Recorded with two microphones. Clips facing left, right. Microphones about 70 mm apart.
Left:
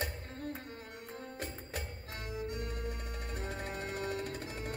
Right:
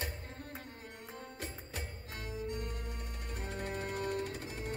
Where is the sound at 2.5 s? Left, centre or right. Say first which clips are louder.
Left 1 dB; left.